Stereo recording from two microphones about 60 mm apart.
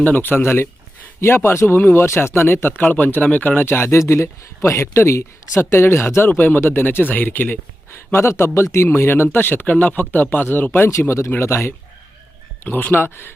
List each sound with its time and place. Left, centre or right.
0.0 s speech: left
3.8 s speech: left
4.0 s speech: left
8.1 s speech: left
8.9 s speech: left
12.6 s speech: left